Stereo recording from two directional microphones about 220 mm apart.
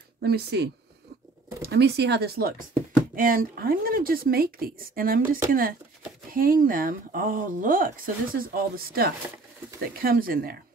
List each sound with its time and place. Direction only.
0.2 s speech: 45° right (ahead or behind)
1.7 s speech: 50° right (ahead or behind)